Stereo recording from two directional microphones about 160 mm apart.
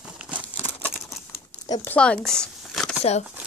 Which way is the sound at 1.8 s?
5° left (ahead or behind).